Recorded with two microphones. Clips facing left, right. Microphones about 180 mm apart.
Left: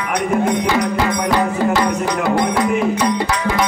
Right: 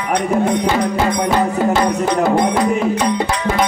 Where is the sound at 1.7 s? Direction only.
25° right (ahead or behind).